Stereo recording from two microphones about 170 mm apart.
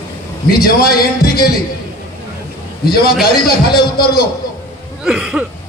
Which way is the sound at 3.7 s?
65° left (ahead or behind).